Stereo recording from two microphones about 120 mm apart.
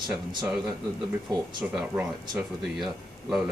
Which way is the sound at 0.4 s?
5° right (ahead or behind).